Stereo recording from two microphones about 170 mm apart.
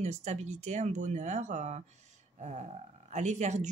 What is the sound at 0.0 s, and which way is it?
Speech, 40° right (ahead or behind).